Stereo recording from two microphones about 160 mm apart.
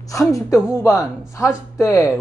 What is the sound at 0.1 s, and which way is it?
Speech, 20° left (ahead or behind).